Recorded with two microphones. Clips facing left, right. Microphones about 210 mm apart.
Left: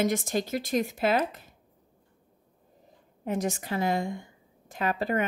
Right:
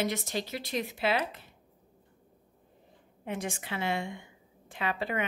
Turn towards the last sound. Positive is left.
turn(degrees=40)  # may be behind; listen again after turning